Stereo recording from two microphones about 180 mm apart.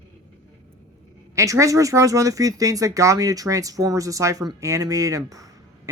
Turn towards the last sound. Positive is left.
turn(degrees=-20)  # may be behind; listen again after turning